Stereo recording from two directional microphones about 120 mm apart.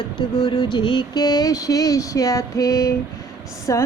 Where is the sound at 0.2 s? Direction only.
40° left (ahead or behind).